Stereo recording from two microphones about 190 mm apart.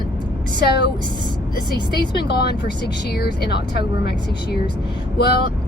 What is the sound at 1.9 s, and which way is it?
Speech, 60° left (ahead or behind).